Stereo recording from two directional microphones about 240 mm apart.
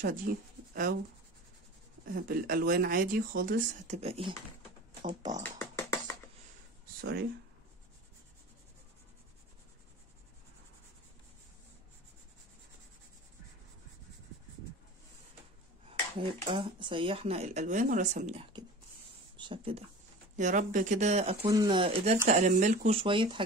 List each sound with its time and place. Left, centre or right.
0.3 s speech: right
2.0 s speech: right
5.4 s beatboxing: centre
7.0 s speech: right
15.9 s speech: right
20.3 s speech: right